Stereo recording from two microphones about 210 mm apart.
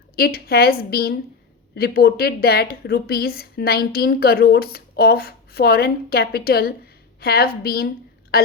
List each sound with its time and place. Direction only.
0.2 s a woman's voice: 45° left (ahead or behind)